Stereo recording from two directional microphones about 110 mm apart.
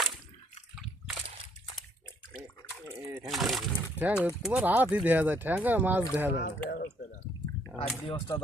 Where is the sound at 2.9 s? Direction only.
20° right (ahead or behind).